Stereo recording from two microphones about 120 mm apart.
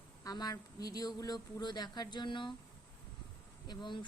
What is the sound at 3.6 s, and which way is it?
Speech, 40° left (ahead or behind).